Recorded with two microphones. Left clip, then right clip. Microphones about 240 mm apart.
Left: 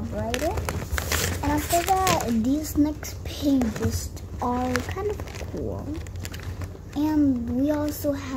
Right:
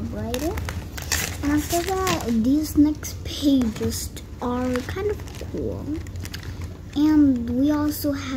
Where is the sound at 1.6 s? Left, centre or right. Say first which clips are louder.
Left 2 dB; left.